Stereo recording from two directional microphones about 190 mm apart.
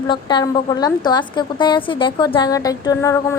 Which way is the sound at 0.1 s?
25° left (ahead or behind).